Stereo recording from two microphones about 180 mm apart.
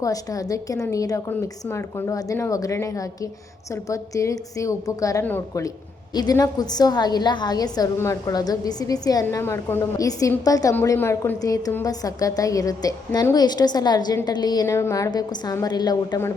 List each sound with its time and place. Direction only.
0.0 s a woman's voice: 20° left (ahead or behind)